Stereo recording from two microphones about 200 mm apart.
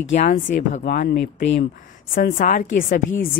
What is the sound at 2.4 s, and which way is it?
Speech, 40° left (ahead or behind).